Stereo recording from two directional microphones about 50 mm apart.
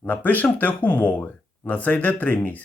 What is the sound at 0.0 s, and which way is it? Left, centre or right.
Speech, left.